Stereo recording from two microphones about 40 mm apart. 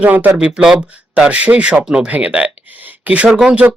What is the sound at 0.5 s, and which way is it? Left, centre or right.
Speech, right.